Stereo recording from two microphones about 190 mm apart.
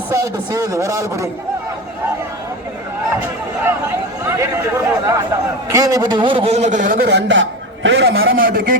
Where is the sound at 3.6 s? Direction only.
15° right (ahead or behind).